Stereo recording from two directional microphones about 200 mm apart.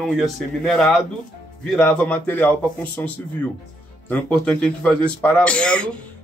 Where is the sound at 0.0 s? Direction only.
Centre (ahead or behind).